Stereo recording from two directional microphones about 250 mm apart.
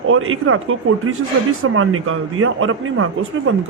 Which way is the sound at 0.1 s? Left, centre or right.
Right.